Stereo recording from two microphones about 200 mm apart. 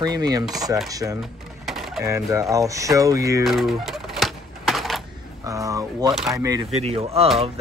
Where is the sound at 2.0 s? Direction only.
15° right (ahead or behind).